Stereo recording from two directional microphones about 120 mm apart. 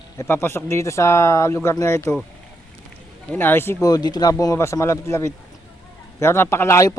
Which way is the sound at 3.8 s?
35° left (ahead or behind).